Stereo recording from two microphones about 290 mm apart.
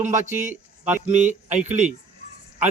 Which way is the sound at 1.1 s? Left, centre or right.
Right.